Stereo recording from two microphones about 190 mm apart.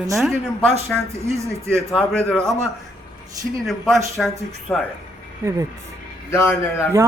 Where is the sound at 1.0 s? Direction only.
15° right (ahead or behind).